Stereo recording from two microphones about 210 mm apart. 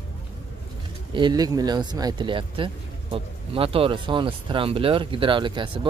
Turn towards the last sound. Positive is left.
turn(degrees=-25)  # may be behind; listen again after turning